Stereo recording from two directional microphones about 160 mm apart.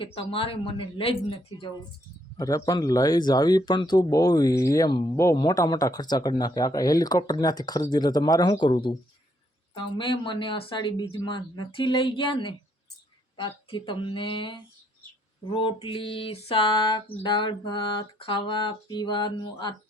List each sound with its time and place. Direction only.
0.0 s speech: 35° left (ahead or behind)
2.4 s speech: 20° left (ahead or behind)